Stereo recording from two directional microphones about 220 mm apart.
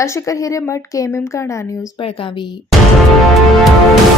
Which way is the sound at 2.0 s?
25° left (ahead or behind).